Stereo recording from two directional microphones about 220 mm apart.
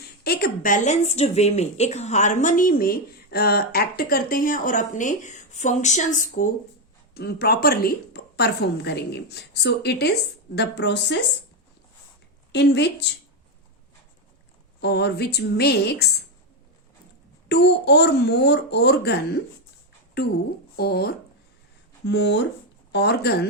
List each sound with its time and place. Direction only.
0.3 s a woman's voice: 45° left (ahead or behind)
12.5 s a woman's voice: 50° left (ahead or behind)
14.8 s a woman's voice: 50° left (ahead or behind)
17.5 s a woman's voice: 50° left (ahead or behind)